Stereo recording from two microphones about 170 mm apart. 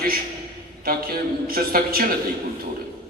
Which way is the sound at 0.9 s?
60° right (ahead or behind).